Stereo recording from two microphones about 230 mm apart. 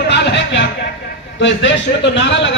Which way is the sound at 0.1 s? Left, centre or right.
Left.